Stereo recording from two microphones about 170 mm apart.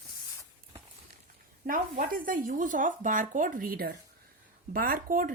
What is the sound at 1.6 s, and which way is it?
Speech, 55° right (ahead or behind).